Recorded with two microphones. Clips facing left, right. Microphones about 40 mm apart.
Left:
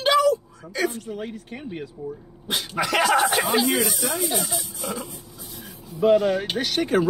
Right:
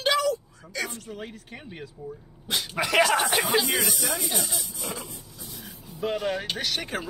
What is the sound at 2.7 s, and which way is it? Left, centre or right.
Speech, centre.